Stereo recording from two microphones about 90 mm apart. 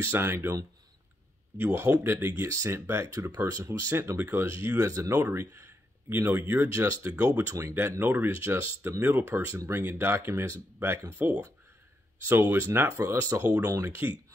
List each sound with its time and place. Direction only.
0.0 s speech: 25° right (ahead or behind)
1.6 s speech: 25° right (ahead or behind)
11.1 s speech: 15° right (ahead or behind)
12.2 s speech: 25° right (ahead or behind)